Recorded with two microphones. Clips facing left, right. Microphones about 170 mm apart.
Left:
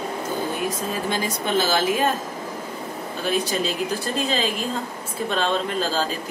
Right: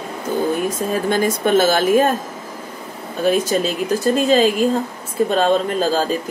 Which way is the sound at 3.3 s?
45° right (ahead or behind).